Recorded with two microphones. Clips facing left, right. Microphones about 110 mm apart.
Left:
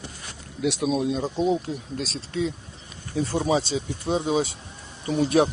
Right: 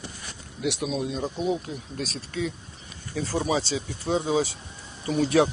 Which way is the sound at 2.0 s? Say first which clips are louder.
Left 2 dB; 30° left (ahead or behind).